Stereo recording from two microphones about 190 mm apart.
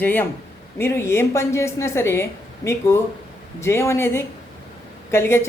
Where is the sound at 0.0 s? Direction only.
10° left (ahead or behind).